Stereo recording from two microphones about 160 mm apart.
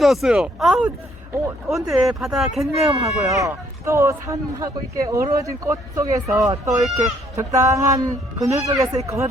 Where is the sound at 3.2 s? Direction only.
20° right (ahead or behind).